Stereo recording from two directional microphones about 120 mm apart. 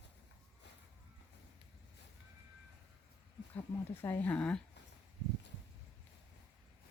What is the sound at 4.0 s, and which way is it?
Speech, 20° left (ahead or behind).